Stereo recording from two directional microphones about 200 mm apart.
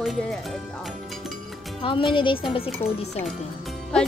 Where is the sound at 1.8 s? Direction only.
25° left (ahead or behind).